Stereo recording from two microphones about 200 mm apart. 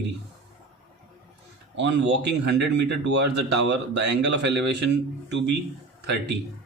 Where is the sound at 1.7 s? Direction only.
60° right (ahead or behind).